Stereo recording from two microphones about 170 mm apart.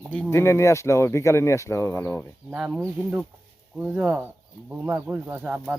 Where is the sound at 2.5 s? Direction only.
5° right (ahead or behind).